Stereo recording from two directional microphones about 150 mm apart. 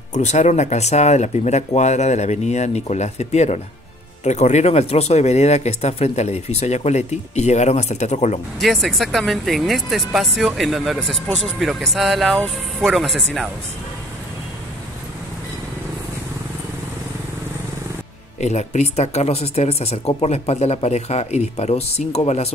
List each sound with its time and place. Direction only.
0.1 s speech: 50° left (ahead or behind)
8.5 s speech: centre (ahead or behind)
18.4 s speech: 50° left (ahead or behind)